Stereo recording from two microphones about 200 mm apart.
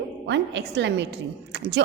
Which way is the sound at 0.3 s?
60° right (ahead or behind).